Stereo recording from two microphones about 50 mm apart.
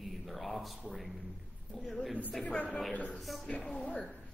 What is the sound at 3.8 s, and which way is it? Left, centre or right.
Speech, left.